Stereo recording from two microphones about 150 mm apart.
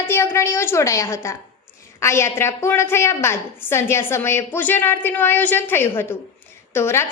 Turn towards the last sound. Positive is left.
turn(degrees=15)  # may be behind; listen again after turning